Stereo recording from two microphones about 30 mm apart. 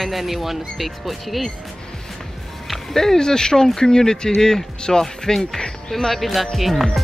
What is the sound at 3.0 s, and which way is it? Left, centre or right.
Speech, left.